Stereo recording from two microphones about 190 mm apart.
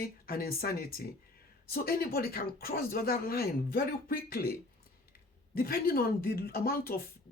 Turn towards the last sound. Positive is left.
turn(degrees=50)  # may be behind; listen again after turning